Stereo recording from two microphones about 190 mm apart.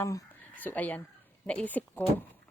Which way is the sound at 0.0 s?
15° left (ahead or behind).